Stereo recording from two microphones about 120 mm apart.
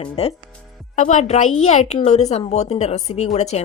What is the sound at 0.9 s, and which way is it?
A child's voice, 85° left.